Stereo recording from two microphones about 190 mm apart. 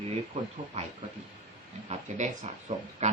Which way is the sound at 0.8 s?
35° right (ahead or behind).